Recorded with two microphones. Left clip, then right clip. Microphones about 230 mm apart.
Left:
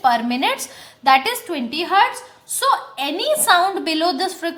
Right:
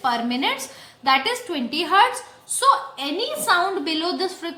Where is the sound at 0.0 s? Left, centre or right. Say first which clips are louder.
Left 5 dB; left; by 2.0 s centre.